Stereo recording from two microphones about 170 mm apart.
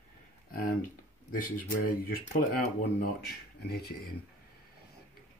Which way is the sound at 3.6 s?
70° left (ahead or behind).